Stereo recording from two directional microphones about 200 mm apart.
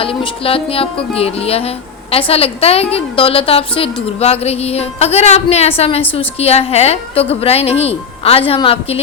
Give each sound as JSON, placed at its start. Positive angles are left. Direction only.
{"t": 0.0, "sound": "a woman's voice", "side_deg": 25}